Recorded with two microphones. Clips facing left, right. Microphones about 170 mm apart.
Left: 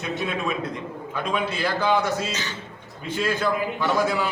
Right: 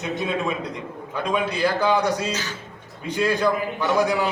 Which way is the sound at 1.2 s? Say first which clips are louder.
Right 4 dB; 15° right (ahead or behind).